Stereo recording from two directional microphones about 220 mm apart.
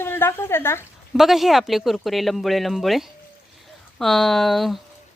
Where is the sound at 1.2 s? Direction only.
Centre (ahead or behind).